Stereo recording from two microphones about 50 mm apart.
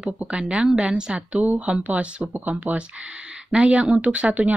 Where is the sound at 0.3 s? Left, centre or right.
Right.